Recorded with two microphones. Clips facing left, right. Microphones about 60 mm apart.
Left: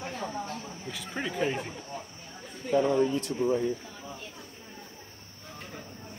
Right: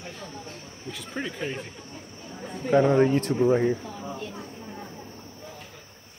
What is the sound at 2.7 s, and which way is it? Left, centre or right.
Speech, right.